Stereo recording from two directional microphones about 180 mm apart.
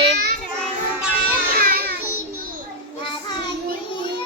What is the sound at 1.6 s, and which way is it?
Music, 55° right (ahead or behind).